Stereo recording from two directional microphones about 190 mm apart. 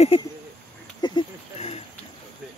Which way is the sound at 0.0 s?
30° left (ahead or behind).